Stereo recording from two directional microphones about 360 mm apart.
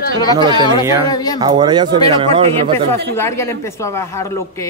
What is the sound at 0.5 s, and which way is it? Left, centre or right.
Speech, centre.